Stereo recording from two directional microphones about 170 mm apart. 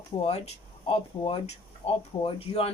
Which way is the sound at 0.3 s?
35° left (ahead or behind).